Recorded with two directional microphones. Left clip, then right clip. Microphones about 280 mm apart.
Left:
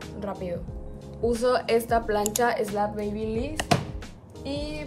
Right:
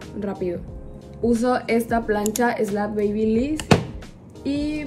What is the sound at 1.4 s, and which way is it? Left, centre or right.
A woman's voice, centre.